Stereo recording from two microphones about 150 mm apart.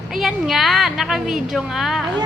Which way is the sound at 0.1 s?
Centre (ahead or behind).